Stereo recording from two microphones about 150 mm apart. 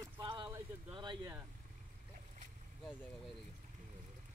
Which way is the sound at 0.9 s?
30° right (ahead or behind).